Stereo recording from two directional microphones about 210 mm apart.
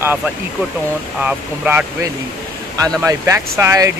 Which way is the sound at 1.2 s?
10° right (ahead or behind).